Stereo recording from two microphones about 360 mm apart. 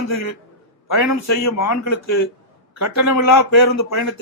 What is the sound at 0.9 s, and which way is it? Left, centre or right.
A man's voice, left.